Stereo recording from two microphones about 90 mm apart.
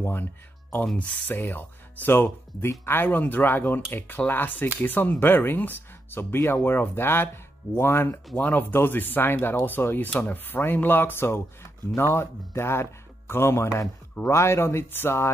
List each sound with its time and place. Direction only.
0.0 s speech: 25° left (ahead or behind)